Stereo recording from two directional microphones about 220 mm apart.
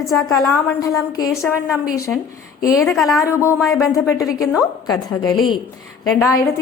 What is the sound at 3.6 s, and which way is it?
Speech, centre (ahead or behind).